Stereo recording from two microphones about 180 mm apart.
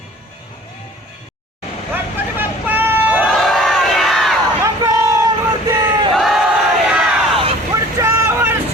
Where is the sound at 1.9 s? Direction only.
10° right (ahead or behind).